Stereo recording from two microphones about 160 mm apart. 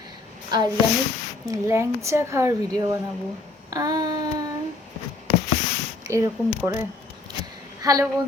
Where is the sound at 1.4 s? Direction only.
20° right (ahead or behind).